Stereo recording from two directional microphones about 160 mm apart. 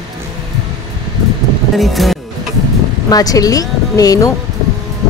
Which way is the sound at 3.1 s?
25° left (ahead or behind).